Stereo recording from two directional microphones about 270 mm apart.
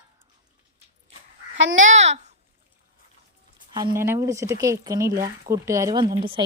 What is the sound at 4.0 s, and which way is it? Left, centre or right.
A woman's voice, centre.